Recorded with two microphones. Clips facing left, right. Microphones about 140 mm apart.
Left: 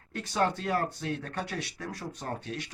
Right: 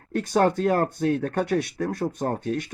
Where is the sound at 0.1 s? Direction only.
50° right (ahead or behind).